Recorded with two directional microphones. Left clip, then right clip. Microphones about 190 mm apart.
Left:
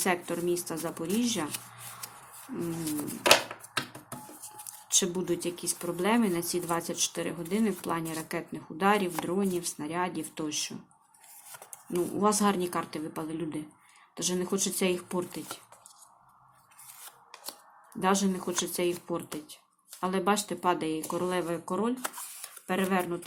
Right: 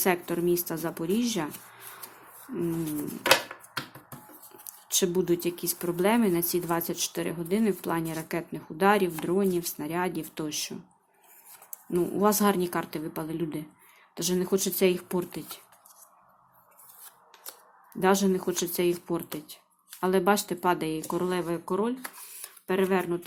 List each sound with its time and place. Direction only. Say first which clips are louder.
0.0 s speech: right 3 dB; 15° right (ahead or behind)
4.9 s speech: right 3 dB; 15° right (ahead or behind)
11.9 s speech: right 3 dB; 20° right (ahead or behind)
18.0 s speech: right 4 dB; 15° right (ahead or behind)